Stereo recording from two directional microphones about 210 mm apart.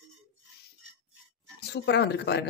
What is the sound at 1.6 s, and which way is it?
Speech, 50° left (ahead or behind).